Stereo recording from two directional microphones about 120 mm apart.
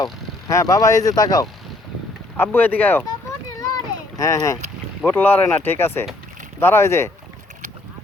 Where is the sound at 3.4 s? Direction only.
30° left (ahead or behind).